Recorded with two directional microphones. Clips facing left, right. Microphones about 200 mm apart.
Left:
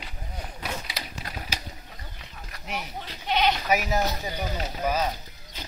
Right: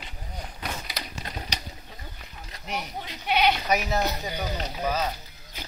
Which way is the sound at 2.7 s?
Centre (ahead or behind).